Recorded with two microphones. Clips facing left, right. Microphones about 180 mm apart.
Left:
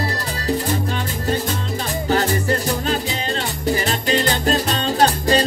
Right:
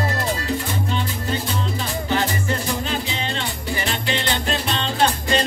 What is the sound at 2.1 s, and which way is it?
Music, 40° left (ahead or behind).